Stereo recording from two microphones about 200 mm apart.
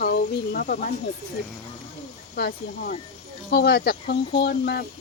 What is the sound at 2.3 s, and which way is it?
Speech, 50° left (ahead or behind).